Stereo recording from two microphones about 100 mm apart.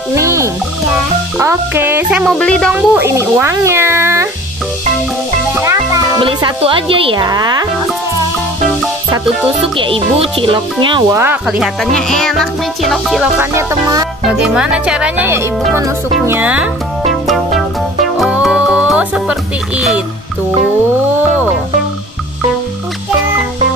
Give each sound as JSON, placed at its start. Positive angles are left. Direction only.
{"t": 0.1, "sound": "frog", "side_deg": -30}
{"t": 1.4, "sound": "music", "side_deg": -25}
{"t": 2.3, "sound": "speech", "side_deg": 10}
{"t": 2.7, "sound": "speech", "side_deg": -15}
{"t": 3.3, "sound": "a sound", "side_deg": -25}
{"t": 5.6, "sound": "music", "side_deg": -35}
{"t": 6.1, "sound": "speech", "side_deg": -50}
{"t": 6.6, "sound": "speech", "side_deg": -65}
{"t": 7.2, "sound": "speech", "side_deg": -40}
{"t": 9.8, "sound": "speech", "side_deg": -65}
{"t": 11.1, "sound": "speech", "side_deg": -25}
{"t": 11.4, "sound": "speech", "side_deg": -5}
{"t": 16.3, "sound": "speech", "side_deg": -15}
{"t": 17.0, "sound": "music", "side_deg": 0}